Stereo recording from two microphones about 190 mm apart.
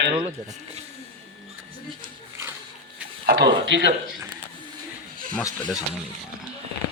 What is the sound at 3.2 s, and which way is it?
Speech, 60° right (ahead or behind).